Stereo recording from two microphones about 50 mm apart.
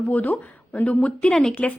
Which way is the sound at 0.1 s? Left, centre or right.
Left.